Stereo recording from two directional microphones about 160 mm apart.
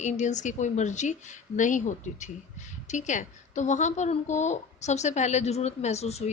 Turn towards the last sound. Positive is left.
turn(degrees=40)  # may be behind; listen again after turning